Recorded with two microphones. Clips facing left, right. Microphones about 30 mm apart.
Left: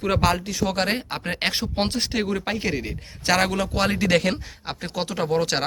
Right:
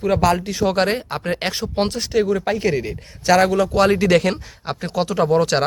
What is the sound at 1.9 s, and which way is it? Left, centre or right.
Speech, left.